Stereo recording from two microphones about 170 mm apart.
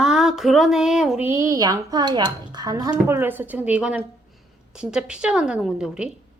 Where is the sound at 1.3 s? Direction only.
15° right (ahead or behind).